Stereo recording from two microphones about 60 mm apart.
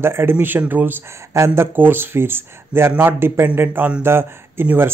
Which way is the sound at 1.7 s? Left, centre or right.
Right.